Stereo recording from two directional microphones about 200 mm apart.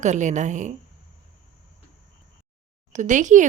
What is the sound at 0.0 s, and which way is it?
Speech, 35° right (ahead or behind).